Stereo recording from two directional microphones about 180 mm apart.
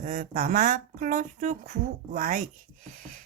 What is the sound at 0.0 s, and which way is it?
Speech, 45° right (ahead or behind).